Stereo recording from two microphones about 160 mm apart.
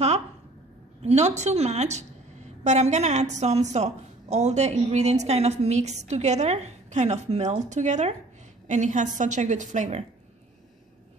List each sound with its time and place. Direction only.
1.0 s a woman's voice: 45° right (ahead or behind)